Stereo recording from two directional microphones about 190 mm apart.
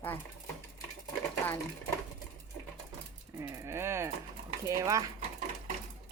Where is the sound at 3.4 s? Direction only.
15° right (ahead or behind).